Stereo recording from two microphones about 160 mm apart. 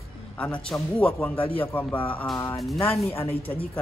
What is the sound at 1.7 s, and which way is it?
Speech, 10° left (ahead or behind).